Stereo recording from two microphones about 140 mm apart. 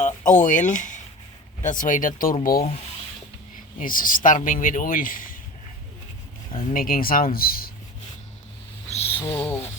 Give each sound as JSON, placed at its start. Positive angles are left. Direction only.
{"t": 0.3, "sound": "speech", "side_deg": 65}
{"t": 2.4, "sound": "speech", "side_deg": 90}
{"t": 3.8, "sound": "speech", "side_deg": 80}
{"t": 6.6, "sound": "speech", "side_deg": 90}
{"t": 8.9, "sound": "a sound", "side_deg": 45}
{"t": 9.2, "sound": "a sound", "side_deg": 15}